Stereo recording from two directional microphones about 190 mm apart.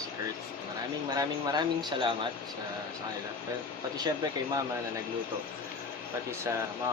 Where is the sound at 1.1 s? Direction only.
20° right (ahead or behind).